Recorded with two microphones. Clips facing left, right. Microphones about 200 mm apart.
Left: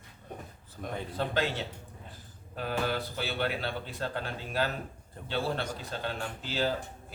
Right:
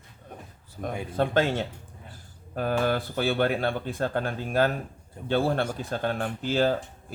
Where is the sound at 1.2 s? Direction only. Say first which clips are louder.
Right 7 dB; 50° right (ahead or behind).